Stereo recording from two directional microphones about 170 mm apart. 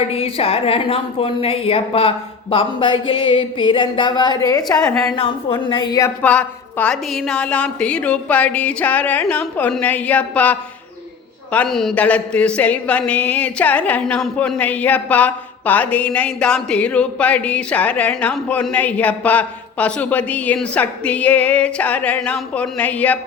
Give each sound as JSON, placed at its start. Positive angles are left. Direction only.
{"t": 0.1, "sound": "a woman's voice", "side_deg": 35}
{"t": 5.1, "sound": "a woman's voice", "side_deg": 35}
{"t": 6.2, "sound": "a woman's voice", "side_deg": 10}